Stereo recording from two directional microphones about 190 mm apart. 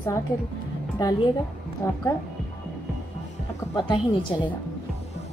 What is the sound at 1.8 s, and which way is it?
Speech, 15° left (ahead or behind).